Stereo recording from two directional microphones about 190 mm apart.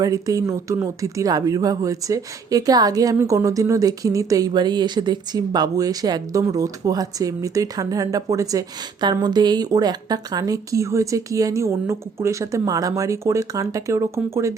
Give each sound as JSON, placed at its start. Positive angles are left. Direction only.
{"t": 0.0, "sound": "speech", "side_deg": -20}